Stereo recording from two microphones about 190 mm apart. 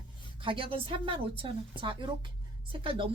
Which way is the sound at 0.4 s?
30° right (ahead or behind).